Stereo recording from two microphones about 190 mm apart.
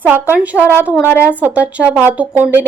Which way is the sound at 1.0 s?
15° left (ahead or behind).